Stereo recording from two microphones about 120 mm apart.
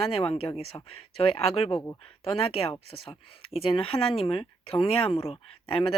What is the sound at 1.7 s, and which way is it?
Speech, 25° left (ahead or behind).